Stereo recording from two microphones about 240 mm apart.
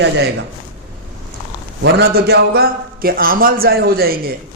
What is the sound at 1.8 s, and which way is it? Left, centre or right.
A man's voice, right.